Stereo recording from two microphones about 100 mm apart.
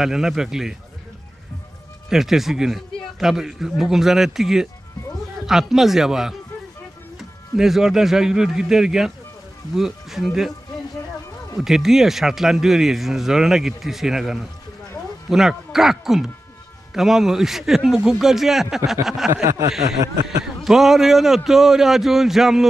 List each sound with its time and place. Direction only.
0.0 s speech: 5° right (ahead or behind)
2.0 s speech: 5° right (ahead or behind)
11.5 s speech: 5° right (ahead or behind)